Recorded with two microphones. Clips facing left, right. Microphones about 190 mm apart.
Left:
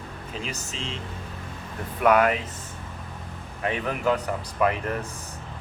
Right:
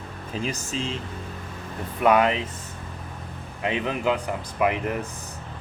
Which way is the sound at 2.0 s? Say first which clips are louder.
Even; 25° right (ahead or behind).